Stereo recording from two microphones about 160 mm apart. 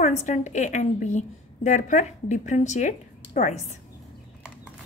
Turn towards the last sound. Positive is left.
turn(degrees=45)  # may be behind; listen again after turning